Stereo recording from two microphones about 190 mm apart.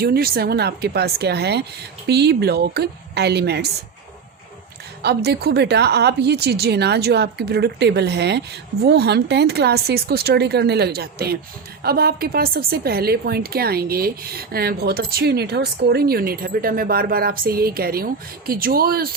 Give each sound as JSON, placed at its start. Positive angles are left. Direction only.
{"t": 0.0, "sound": "a woman's voice", "side_deg": -55}
{"t": 5.0, "sound": "a woman's voice", "side_deg": -60}